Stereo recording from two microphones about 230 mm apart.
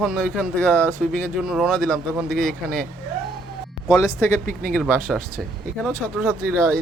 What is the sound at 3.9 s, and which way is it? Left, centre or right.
Speech, centre.